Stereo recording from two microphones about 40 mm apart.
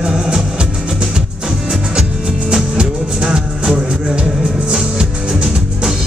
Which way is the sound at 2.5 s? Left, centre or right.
Right.